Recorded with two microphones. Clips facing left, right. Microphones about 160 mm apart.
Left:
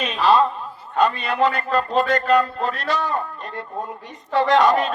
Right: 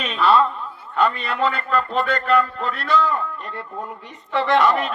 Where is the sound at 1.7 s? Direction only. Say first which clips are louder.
Left 2 dB; 35° left (ahead or behind).